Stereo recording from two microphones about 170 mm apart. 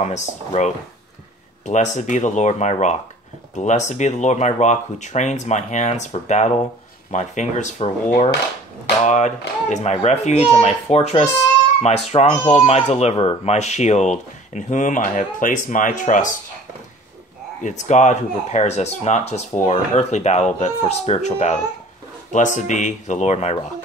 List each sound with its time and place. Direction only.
0.0 s speech: 40° left (ahead or behind)
17.6 s speech: 45° left (ahead or behind)